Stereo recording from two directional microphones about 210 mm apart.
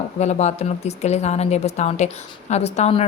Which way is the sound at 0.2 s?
30° left (ahead or behind).